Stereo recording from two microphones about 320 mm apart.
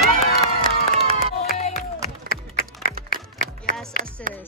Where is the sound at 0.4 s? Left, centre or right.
Right.